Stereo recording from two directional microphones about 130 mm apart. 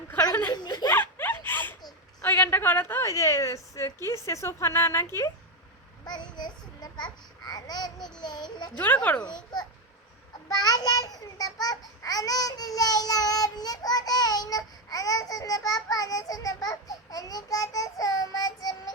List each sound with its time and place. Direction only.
0.5 s a child's voice: 30° left (ahead or behind)
1.2 s a sound: 15° left (ahead or behind)
2.2 s a child's voice: 15° left (ahead or behind)
6.1 s a child's voice: 35° left (ahead or behind)
8.7 s speech: 10° left (ahead or behind)
9.2 s a child's voice: 30° left (ahead or behind)